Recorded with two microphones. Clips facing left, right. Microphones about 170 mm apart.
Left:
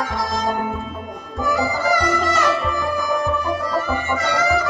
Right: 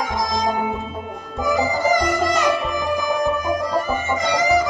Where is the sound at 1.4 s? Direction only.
15° right (ahead or behind).